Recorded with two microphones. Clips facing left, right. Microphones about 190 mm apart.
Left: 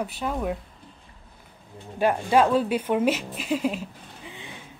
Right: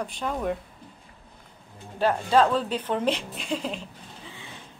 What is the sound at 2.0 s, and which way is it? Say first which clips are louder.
Speech: left 1 dB; 10° left (ahead or behind).